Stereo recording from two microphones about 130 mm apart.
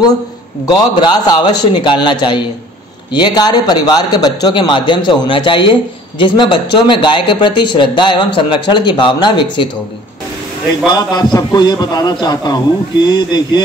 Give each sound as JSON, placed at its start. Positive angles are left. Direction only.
{"t": 0.7, "sound": "a man's voice", "side_deg": 30}
{"t": 10.9, "sound": "a man's voice", "side_deg": 30}